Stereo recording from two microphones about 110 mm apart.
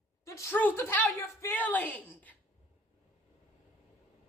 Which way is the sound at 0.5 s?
15° left (ahead or behind).